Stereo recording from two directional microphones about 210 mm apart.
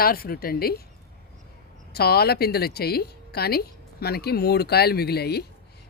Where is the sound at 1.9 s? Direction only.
50° left (ahead or behind).